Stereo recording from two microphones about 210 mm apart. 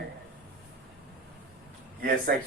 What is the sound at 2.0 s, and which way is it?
Speech, 45° right (ahead or behind).